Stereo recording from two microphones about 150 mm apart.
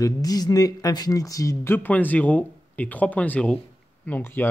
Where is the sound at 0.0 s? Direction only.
25° left (ahead or behind).